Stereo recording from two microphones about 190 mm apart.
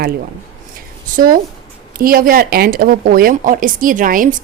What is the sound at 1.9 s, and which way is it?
Speech, 50° right (ahead or behind).